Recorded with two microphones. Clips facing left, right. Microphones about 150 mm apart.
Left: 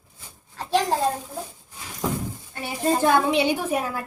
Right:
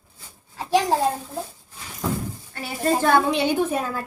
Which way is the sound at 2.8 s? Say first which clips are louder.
Right 1 dB; 15° left (ahead or behind).